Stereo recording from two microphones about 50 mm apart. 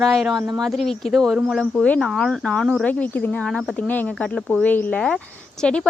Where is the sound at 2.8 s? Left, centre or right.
Left.